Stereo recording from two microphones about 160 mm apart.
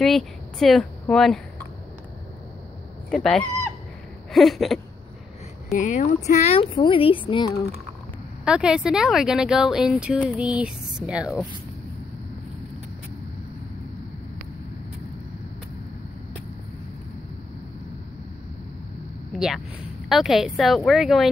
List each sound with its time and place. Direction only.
0.0 s speech: centre (ahead or behind)
3.1 s speech: 5° left (ahead or behind)
5.7 s speech: 50° left (ahead or behind); by 7.5 s 30° left (ahead or behind)
8.5 s speech: 5° right (ahead or behind)
19.3 s speech: 5° right (ahead or behind)